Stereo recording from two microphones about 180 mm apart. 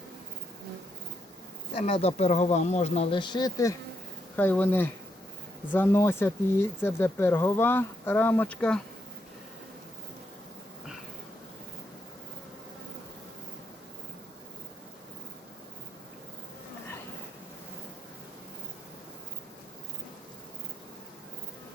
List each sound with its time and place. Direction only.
1.7 s speech: 35° left (ahead or behind)
4.4 s speech: 10° left (ahead or behind)